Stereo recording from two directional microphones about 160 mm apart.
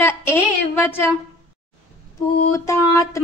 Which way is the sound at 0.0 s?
15° left (ahead or behind).